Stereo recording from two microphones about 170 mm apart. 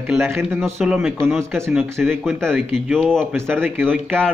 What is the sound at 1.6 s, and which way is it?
Speech, 15° right (ahead or behind).